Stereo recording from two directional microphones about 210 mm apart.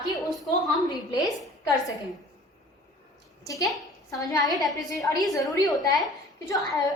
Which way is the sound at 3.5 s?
15° left (ahead or behind).